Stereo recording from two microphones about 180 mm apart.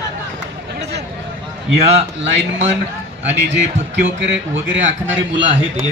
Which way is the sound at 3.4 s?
90° right.